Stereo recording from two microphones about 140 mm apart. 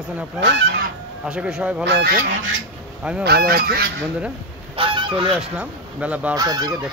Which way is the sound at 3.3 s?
90° right.